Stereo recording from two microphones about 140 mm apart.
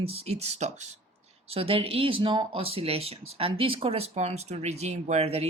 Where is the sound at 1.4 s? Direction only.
45° right (ahead or behind).